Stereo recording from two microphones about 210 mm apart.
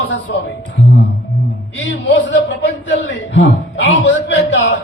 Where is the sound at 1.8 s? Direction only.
60° left (ahead or behind).